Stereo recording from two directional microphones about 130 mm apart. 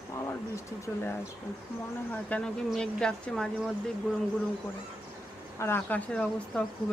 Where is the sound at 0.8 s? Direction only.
20° left (ahead or behind).